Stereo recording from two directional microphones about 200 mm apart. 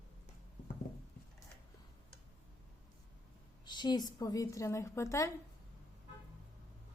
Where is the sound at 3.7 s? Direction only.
20° left (ahead or behind).